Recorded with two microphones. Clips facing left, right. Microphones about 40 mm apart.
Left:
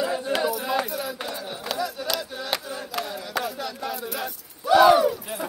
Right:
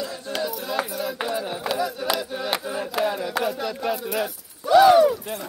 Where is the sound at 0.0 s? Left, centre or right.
Left.